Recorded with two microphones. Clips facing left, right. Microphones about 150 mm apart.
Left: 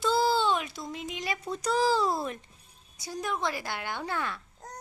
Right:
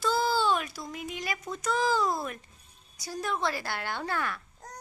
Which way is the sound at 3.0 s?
20° left (ahead or behind).